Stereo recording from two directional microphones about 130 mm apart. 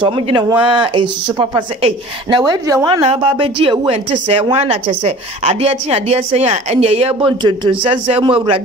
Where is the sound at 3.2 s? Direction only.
40° right (ahead or behind).